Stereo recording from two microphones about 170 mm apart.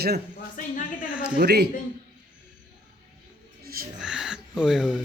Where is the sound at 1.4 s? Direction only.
70° right (ahead or behind).